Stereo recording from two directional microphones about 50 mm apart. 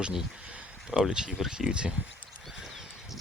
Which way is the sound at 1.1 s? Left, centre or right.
Centre.